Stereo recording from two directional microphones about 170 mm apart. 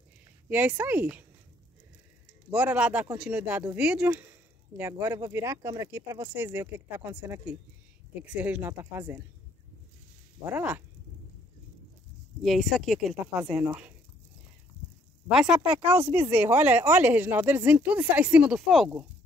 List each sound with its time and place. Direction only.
0.5 s speech: 10° right (ahead or behind)
2.5 s speech: 10° right (ahead or behind)
10.4 s speech: 10° right (ahead or behind)
12.4 s speech: centre (ahead or behind)
15.2 s speech: 5° right (ahead or behind)